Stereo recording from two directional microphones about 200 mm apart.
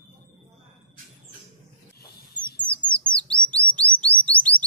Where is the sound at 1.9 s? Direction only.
50° left (ahead or behind).